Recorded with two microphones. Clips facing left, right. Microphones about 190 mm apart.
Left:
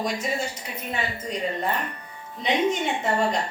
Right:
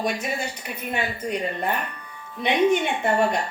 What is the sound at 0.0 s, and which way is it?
A woman's voice, 60° right (ahead or behind).